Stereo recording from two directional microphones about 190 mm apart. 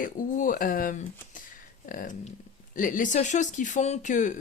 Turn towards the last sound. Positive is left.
turn(degrees=40)  # may be behind; listen again after turning